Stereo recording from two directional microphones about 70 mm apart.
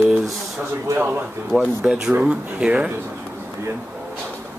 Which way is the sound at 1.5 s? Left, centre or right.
Right.